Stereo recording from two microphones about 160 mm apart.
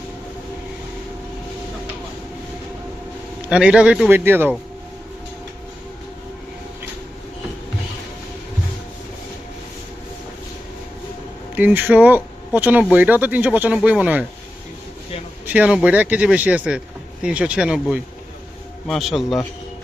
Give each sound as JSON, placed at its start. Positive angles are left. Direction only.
{"t": 3.5, "sound": "speech", "side_deg": -5}
{"t": 11.5, "sound": "speech", "side_deg": -10}
{"t": 15.4, "sound": "speech", "side_deg": -10}